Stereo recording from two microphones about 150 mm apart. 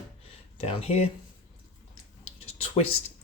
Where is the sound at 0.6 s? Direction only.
40° left (ahead or behind).